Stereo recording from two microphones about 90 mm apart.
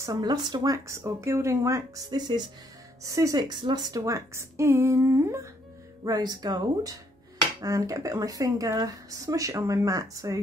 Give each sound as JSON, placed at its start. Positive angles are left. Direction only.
{"t": 0.0, "sound": "speech", "side_deg": -45}
{"t": 0.8, "sound": "speech", "side_deg": -35}
{"t": 2.0, "sound": "speech", "side_deg": -55}
{"t": 3.0, "sound": "speech", "side_deg": -40}
{"t": 6.0, "sound": "speech", "side_deg": -45}